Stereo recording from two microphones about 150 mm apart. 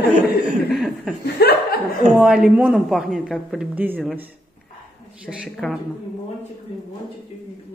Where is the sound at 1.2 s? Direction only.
90° left.